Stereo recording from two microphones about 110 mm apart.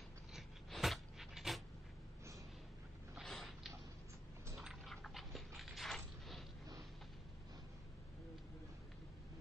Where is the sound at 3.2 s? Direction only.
5° left (ahead or behind).